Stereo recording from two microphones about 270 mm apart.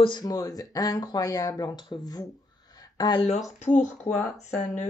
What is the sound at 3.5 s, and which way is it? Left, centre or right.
Speech, left.